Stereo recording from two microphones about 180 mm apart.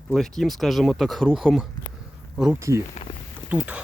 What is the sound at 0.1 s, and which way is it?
Speech, centre (ahead or behind).